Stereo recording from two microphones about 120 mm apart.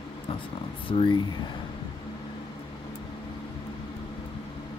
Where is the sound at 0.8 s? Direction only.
45° left (ahead or behind).